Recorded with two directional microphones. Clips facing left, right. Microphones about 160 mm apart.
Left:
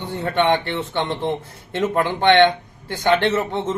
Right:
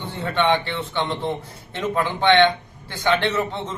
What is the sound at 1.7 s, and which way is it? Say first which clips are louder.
Speech: left 3 dB; 50° left (ahead or behind).